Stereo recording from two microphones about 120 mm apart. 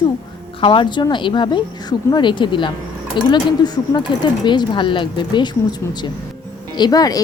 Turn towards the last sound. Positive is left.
turn(degrees=30)  # may be behind; listen again after turning